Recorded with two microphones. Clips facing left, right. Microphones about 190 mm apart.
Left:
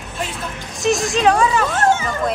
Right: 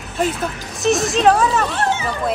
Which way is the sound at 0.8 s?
Centre (ahead or behind).